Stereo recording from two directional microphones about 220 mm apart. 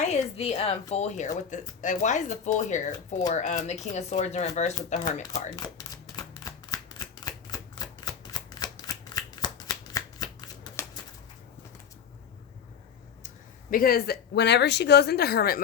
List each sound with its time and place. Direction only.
0.0 s a woman's voice: 30° left (ahead or behind)
5.2 s a sound: 15° left (ahead or behind)
13.2 s speech: 40° left (ahead or behind)